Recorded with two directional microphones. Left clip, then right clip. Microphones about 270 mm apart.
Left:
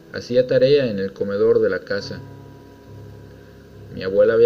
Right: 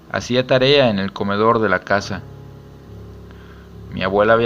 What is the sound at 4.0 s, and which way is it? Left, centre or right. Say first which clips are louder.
Speech: right 2 dB; right.